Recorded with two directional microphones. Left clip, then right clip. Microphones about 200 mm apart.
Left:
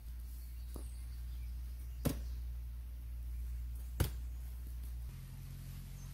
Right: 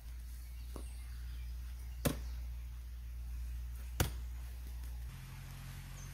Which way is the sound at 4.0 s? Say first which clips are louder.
Right 4 dB; 15° right (ahead or behind).